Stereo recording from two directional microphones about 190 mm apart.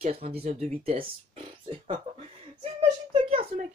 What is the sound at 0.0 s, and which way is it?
Speech, 30° right (ahead or behind).